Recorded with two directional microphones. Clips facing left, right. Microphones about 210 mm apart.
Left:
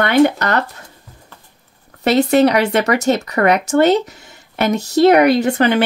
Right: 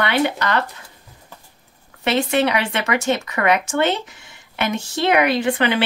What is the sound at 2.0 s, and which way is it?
Speech, 40° left (ahead or behind).